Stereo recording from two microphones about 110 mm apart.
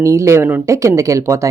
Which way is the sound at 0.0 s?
25° right (ahead or behind).